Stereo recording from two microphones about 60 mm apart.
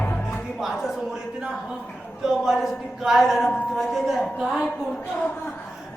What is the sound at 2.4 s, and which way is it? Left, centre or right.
A woman's voice, centre.